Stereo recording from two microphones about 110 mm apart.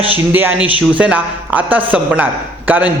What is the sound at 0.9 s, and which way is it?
A man's voice, 15° right (ahead or behind).